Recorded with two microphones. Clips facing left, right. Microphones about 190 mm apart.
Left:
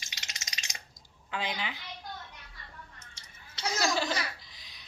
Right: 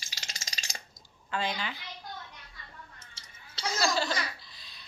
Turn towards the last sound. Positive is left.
turn(degrees=15)  # may be behind; listen again after turning